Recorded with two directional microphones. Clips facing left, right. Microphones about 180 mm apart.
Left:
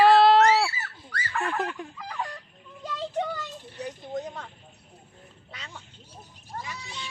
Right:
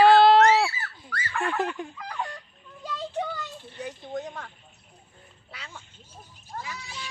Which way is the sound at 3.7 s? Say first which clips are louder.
Even; centre (ahead or behind).